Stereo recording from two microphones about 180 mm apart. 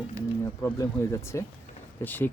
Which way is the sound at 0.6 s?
15° left (ahead or behind).